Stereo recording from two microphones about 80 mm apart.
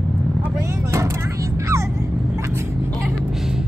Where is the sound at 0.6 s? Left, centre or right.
Right.